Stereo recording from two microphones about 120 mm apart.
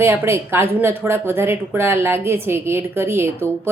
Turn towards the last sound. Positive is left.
turn(degrees=-20)  # may be behind; listen again after turning